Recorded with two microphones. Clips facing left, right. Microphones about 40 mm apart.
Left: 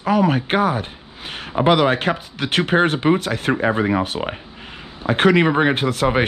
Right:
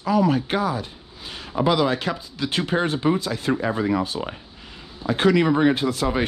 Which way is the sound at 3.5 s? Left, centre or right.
Left.